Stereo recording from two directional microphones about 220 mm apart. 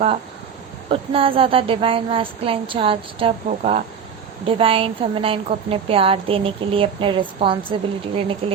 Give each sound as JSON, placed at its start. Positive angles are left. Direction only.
{"t": 0.9, "sound": "a woman's voice", "side_deg": -25}